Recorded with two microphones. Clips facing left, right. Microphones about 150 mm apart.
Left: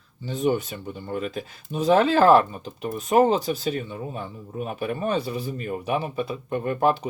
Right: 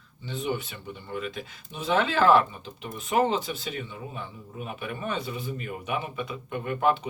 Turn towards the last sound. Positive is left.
turn(degrees=35)  # may be behind; listen again after turning